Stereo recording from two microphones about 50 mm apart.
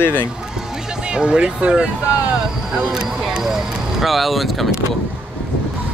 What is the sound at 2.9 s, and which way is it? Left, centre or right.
Speech, centre.